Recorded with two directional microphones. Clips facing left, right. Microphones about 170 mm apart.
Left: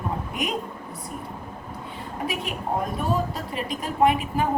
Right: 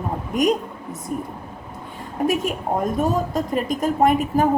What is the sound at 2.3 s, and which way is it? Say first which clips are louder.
A woman's voice: right 5 dB; 45° right (ahead or behind).